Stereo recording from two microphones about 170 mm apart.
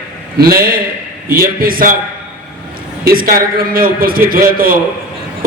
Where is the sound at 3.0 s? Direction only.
60° right (ahead or behind).